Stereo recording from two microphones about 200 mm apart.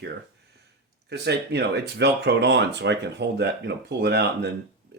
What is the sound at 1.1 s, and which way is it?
Speech, 55° right (ahead or behind).